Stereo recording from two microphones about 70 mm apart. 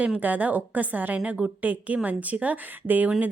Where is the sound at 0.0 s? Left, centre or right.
Right.